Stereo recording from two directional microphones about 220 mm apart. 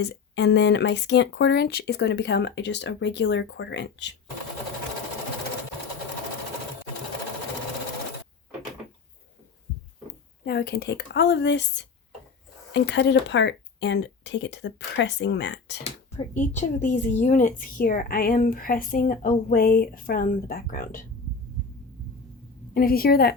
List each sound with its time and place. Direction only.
0.0 s speech: 50° left (ahead or behind)
10.4 s speech: 45° left (ahead or behind)
15.8 s a woman's voice: 35° left (ahead or behind)
22.7 s speech: 40° left (ahead or behind)